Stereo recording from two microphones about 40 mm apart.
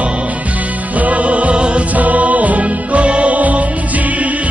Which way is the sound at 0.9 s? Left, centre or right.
Right.